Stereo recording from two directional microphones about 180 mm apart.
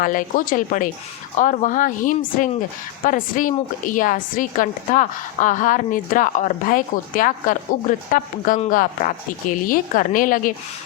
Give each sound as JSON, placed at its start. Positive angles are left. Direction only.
{"t": 0.0, "sound": "a woman's voice", "side_deg": 50}